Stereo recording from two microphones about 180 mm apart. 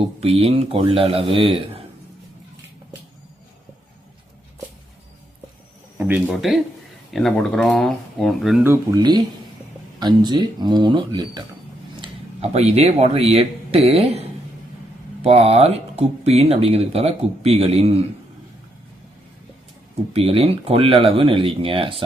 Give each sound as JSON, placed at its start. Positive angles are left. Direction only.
{"t": 0.2, "sound": "speech", "side_deg": -35}
{"t": 6.0, "sound": "speech", "side_deg": -5}
{"t": 8.6, "sound": "speech", "side_deg": -15}
{"t": 20.1, "sound": "speech", "side_deg": -30}